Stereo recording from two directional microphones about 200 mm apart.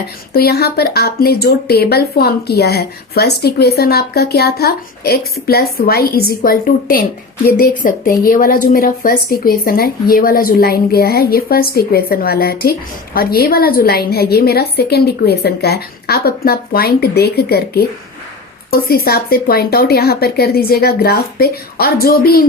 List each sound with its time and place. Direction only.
0.3 s speech: 50° left (ahead or behind)